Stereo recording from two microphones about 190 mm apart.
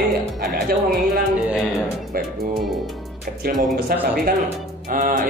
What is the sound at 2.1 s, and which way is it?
Speech, 50° right (ahead or behind).